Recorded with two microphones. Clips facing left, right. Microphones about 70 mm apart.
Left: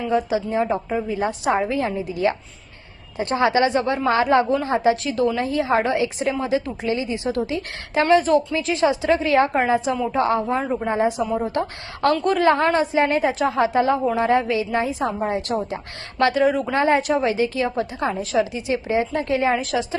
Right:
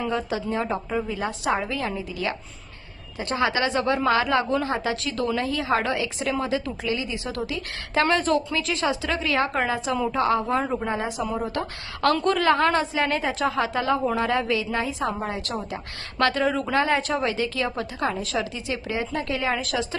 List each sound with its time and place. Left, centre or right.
0.1 s a woman's voice: centre
10.6 s speech: centre
10.8 s a woman's voice: left
16.7 s a woman's voice: left